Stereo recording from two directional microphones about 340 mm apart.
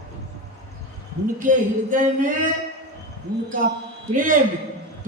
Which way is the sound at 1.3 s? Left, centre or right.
Right.